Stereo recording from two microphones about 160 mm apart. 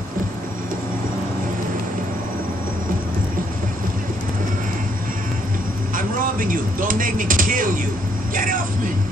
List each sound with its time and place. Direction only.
5.9 s speech: 60° right (ahead or behind)